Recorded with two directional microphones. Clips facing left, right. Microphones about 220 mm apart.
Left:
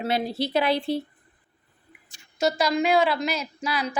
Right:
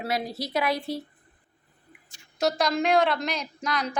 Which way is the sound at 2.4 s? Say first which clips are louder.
Left 2 dB; centre (ahead or behind).